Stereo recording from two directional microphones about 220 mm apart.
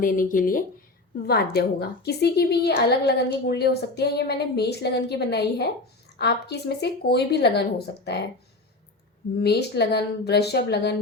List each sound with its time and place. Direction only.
0.0 s a woman's voice: 40° left (ahead or behind)
9.4 s a woman's voice: 50° left (ahead or behind)